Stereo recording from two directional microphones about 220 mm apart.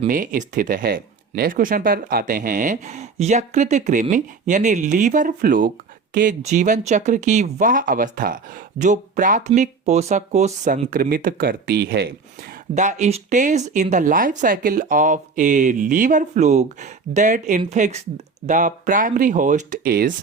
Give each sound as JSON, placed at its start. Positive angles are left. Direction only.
{"t": 0.1, "sound": "speech", "side_deg": -35}
{"t": 12.7, "sound": "speech", "side_deg": -35}